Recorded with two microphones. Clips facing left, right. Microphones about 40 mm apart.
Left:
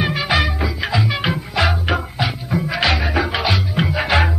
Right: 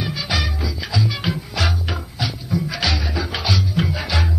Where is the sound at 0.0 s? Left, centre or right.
Left.